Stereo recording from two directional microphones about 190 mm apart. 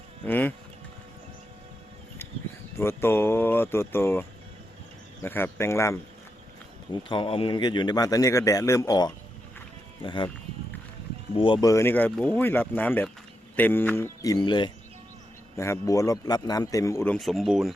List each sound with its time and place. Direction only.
0.3 s speech: 10° left (ahead or behind)
2.7 s a man's voice: 15° left (ahead or behind)
7.1 s a man's voice: 25° left (ahead or behind)
11.3 s a man's voice: 25° left (ahead or behind); by 17.7 s centre (ahead or behind)